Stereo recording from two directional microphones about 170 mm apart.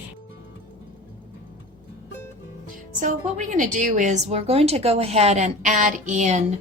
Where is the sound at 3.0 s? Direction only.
50° right (ahead or behind).